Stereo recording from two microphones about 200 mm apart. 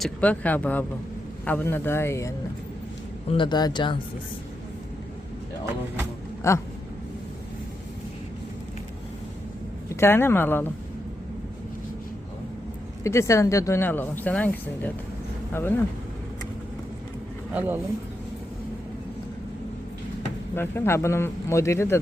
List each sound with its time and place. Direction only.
0.0 s speech: 5° left (ahead or behind)
3.3 s speech: 20° left (ahead or behind)
6.4 s speech: 15° left (ahead or behind)
9.9 s speech: 10° left (ahead or behind)
13.0 s speech: 15° left (ahead or behind)
17.5 s speech: 10° right (ahead or behind)
20.6 s speech: 10° left (ahead or behind)